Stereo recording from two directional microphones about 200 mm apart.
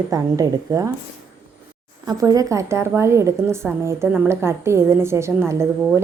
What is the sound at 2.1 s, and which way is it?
A woman's voice, 20° right (ahead or behind).